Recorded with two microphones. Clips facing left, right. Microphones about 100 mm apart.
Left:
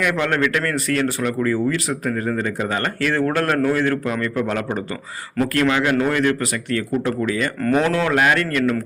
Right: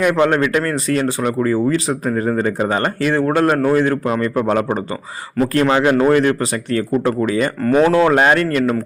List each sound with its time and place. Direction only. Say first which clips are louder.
0.0 s speech: right 5 dB; 25° right (ahead or behind)
7.6 s speech: right 6 dB; 10° right (ahead or behind)
8.0 s speech: right 5 dB; 35° right (ahead or behind)